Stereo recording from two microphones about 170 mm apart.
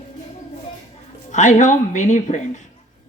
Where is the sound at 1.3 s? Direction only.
45° left (ahead or behind).